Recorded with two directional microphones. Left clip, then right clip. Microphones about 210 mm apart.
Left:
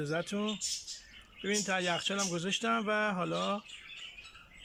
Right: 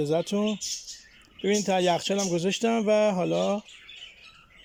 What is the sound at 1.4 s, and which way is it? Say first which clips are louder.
Speech: right 8 dB; 25° right (ahead or behind).